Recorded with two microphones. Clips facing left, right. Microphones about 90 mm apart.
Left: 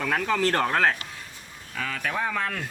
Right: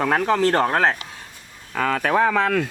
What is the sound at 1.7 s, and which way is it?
Speech, 55° right (ahead or behind).